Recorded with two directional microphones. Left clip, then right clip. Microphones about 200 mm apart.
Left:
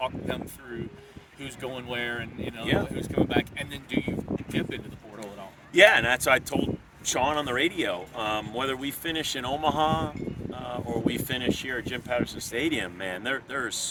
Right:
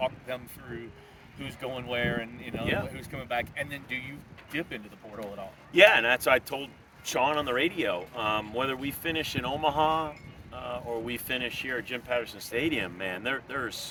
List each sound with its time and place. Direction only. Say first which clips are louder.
1.4 s speech: even; 15° right (ahead or behind)
5.7 s speech: left 1 dB; 10° left (ahead or behind)